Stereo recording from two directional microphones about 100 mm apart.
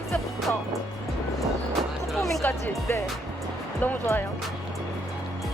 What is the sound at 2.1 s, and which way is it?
Speech, centre (ahead or behind).